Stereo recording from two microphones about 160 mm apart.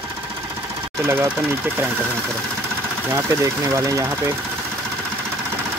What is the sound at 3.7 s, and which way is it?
Speech, 20° right (ahead or behind).